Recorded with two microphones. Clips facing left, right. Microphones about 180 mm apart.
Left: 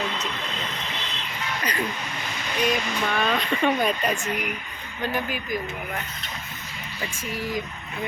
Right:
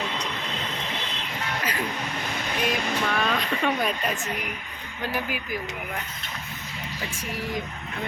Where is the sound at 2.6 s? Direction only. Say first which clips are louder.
Left 2 dB; centre (ahead or behind).